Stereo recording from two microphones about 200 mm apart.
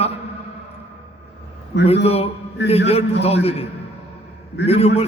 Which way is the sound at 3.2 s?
30° left (ahead or behind).